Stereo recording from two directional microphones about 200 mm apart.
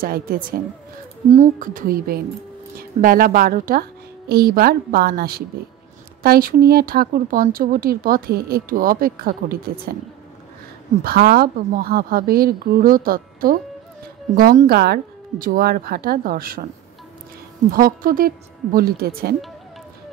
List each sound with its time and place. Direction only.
0.0 s speech: 45° right (ahead or behind)
11.1 s speech: 45° right (ahead or behind)
17.6 s speech: 45° right (ahead or behind)